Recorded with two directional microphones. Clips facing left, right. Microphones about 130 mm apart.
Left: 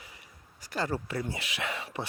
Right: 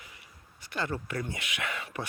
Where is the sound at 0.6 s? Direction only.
35° left (ahead or behind).